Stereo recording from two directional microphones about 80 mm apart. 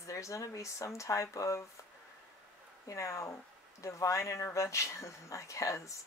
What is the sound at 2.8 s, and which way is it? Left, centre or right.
Speech, left.